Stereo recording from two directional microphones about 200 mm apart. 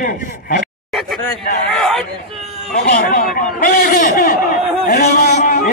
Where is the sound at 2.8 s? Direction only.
45° left (ahead or behind).